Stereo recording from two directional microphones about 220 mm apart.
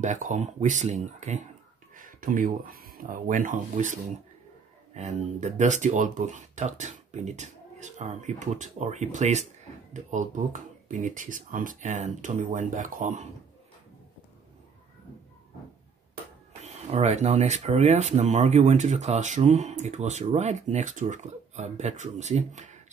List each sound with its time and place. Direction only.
0.0 s speech: 35° right (ahead or behind)
16.6 s speech: 30° right (ahead or behind)